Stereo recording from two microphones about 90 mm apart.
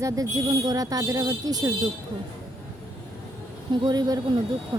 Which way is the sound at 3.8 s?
50° right (ahead or behind).